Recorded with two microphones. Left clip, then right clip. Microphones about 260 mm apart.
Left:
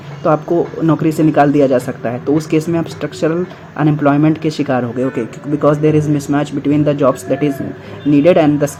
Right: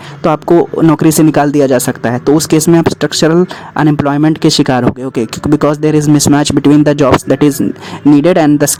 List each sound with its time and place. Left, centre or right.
0.2 s speech: right